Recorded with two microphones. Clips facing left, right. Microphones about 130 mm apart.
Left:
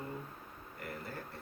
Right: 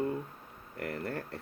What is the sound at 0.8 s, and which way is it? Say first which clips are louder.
Speech: right 8 dB; 65° right (ahead or behind).